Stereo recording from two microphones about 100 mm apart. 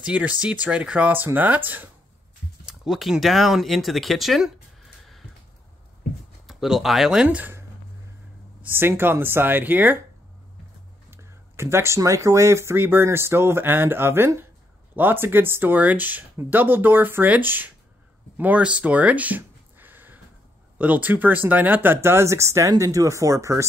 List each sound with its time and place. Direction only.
0.0 s speech: 15° right (ahead or behind)
2.6 s speech: 5° right (ahead or behind)
6.4 s speech: 5° right (ahead or behind)
7.2 s speech: 15° right (ahead or behind)
8.6 s speech: 20° right (ahead or behind)
11.1 s speech: 25° right (ahead or behind)